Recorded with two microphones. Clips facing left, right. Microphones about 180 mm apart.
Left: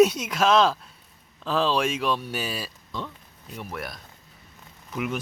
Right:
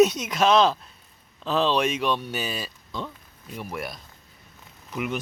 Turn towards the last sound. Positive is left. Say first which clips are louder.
# even
turn(degrees=0)  # may be behind; listen again after turning